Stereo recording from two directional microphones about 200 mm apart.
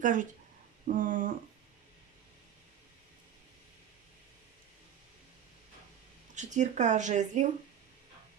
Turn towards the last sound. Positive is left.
turn(degrees=-35)  # may be behind; listen again after turning